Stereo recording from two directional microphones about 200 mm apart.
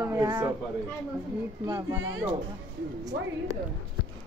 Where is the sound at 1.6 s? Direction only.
15° right (ahead or behind).